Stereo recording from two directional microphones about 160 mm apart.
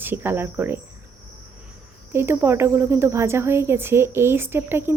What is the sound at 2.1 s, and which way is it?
Speech, 15° right (ahead or behind).